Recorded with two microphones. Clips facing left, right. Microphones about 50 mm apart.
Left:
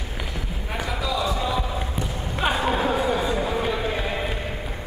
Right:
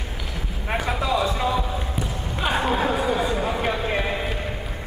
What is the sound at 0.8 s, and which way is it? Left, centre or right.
Clip-clop, right.